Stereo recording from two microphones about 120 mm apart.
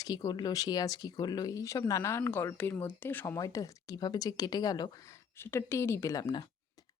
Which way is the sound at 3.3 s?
30° left (ahead or behind).